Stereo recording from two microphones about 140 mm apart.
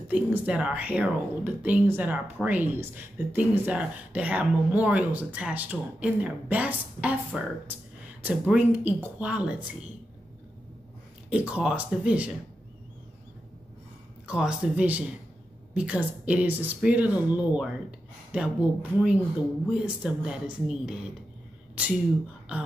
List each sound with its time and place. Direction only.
0.1 s speech: 10° right (ahead or behind)
11.2 s speech: 10° right (ahead or behind)
14.2 s speech: 5° right (ahead or behind)